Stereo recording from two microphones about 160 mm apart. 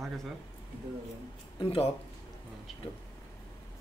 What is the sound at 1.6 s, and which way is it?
Speech, 35° left (ahead or behind).